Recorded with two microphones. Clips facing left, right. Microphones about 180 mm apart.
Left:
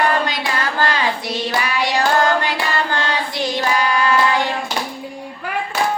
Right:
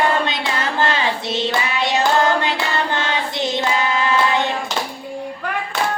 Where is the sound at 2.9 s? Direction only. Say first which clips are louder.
Even; 20° right (ahead or behind).